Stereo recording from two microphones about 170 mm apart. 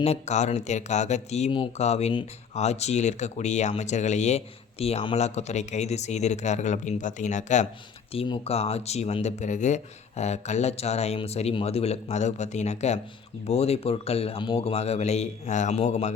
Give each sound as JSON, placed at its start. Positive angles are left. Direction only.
{"t": 0.0, "sound": "speech", "side_deg": 40}
{"t": 8.1, "sound": "speech", "side_deg": 35}